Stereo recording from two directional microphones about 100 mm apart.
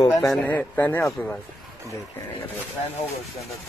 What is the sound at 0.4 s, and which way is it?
Speech, 20° left (ahead or behind).